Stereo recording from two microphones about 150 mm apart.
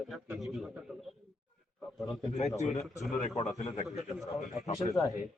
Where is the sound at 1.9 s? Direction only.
Centre (ahead or behind).